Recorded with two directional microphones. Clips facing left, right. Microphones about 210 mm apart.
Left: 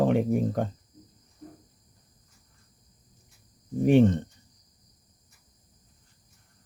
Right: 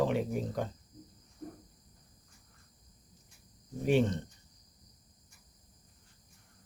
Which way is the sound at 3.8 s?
50° left (ahead or behind).